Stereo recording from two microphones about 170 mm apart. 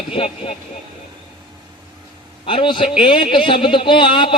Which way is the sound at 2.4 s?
30° left (ahead or behind).